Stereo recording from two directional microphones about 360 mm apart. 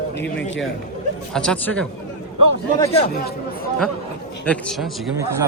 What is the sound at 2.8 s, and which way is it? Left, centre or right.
Speech, centre.